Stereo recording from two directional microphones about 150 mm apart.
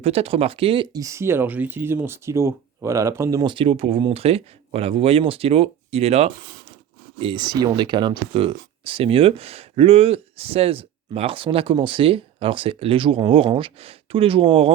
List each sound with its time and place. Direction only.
0.0 s speech: 40° right (ahead or behind)
0.9 s speech: 20° right (ahead or behind)
3.5 s speech: 35° right (ahead or behind)